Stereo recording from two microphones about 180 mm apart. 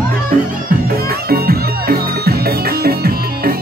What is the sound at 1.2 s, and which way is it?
Music, 60° right (ahead or behind).